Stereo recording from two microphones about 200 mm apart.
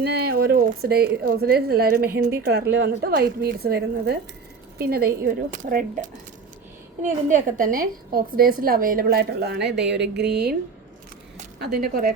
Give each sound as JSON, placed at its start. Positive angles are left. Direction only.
{"t": 0.0, "sound": "a sound", "side_deg": -55}
{"t": 1.1, "sound": "a woman's voice", "side_deg": -50}
{"t": 11.6, "sound": "a woman's voice", "side_deg": -50}